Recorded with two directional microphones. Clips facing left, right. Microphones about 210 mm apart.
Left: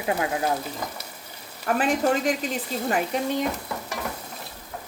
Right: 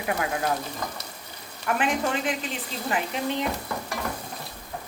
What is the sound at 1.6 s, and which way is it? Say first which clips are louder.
Speech: left 3 dB; 40° left (ahead or behind).